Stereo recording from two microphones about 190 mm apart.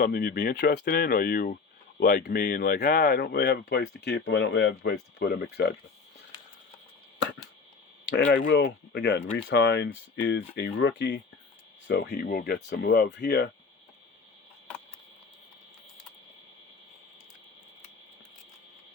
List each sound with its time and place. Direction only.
0.0 s speech: 55° left (ahead or behind)
8.4 s speech: 70° left (ahead or behind)